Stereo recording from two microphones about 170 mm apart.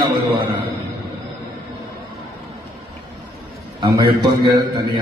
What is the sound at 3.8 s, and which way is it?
Speech, 25° right (ahead or behind).